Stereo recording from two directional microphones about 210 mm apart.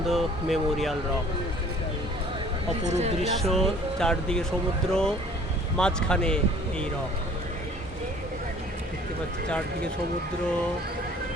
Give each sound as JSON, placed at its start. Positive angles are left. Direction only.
{"t": 0.1, "sound": "speech", "side_deg": 0}
{"t": 2.8, "sound": "speech", "side_deg": -30}
{"t": 3.5, "sound": "speech", "side_deg": 0}